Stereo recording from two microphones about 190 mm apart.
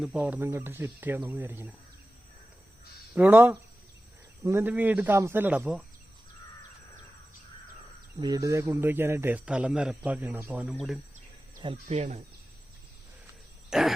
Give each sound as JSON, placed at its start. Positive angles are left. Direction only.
{"t": 0.0, "sound": "speech", "side_deg": -5}
{"t": 3.2, "sound": "speech", "side_deg": -10}
{"t": 8.2, "sound": "speech", "side_deg": -20}
{"t": 11.6, "sound": "speech", "side_deg": -30}
{"t": 13.7, "sound": "cough", "side_deg": 0}